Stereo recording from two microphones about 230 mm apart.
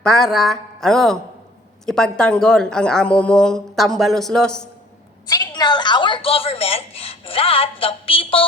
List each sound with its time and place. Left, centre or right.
0.0 s a woman's voice: centre
5.3 s a woman's voice: centre